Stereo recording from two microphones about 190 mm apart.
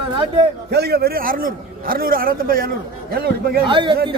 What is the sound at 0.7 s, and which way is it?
A man's voice, 60° right (ahead or behind).